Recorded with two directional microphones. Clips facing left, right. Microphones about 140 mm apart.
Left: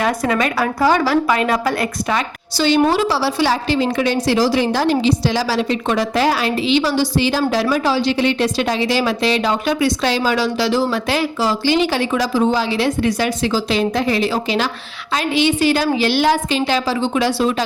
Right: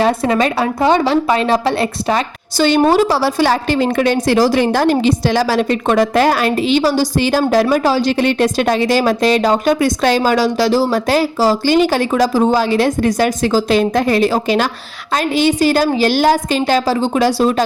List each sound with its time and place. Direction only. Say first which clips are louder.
0.0 s a woman's voice: right 4 dB; 30° right (ahead or behind)
2.6 s a woman's voice: right 3 dB; 55° right (ahead or behind)